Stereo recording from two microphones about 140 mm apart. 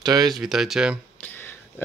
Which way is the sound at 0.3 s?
Centre (ahead or behind).